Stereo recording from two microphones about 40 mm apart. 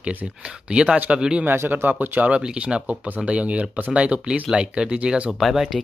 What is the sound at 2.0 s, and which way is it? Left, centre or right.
Speech, right.